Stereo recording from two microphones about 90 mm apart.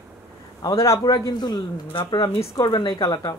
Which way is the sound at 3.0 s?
65° left (ahead or behind).